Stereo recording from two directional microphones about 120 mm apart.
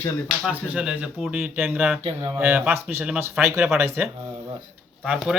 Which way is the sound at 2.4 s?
15° right (ahead or behind).